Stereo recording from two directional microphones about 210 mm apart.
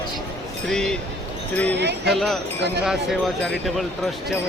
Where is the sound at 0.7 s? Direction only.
5° left (ahead or behind).